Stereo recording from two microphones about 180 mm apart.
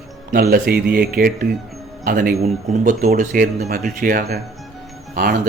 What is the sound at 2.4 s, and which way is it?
Speech, 40° right (ahead or behind).